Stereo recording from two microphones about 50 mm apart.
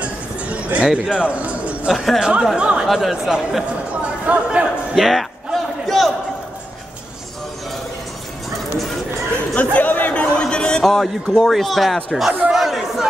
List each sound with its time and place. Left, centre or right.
0.0 s a sound: right
1.1 s speech: right
1.9 s a man's voice: centre
2.1 s speech: centre
2.9 s a man's voice: centre
4.0 s chatter: right
4.9 s a sound: centre
9.6 s chatter: left
10.1 s a sound: left
10.8 s a man's voice: centre
12.4 s chatter: centre